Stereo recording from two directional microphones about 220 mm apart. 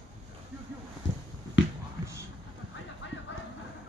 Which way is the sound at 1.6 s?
55° left (ahead or behind).